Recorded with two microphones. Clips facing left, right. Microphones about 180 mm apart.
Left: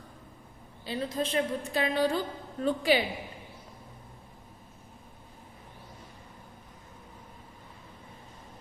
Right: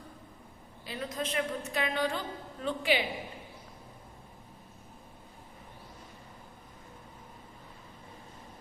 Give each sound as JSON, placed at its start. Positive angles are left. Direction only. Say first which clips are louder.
{"t": 0.9, "sound": "a woman's voice", "louder": "left 4 dB", "side_deg": 30}